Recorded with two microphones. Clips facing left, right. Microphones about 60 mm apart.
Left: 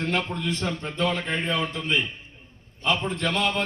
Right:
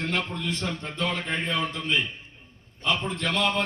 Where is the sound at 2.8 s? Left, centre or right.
Left.